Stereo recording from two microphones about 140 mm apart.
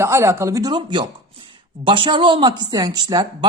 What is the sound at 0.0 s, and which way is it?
A woman's voice, 20° right (ahead or behind).